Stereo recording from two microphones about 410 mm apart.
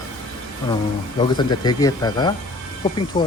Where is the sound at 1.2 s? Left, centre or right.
Centre.